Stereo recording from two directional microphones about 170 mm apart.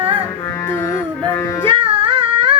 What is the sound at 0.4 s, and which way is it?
Music, 15° left (ahead or behind).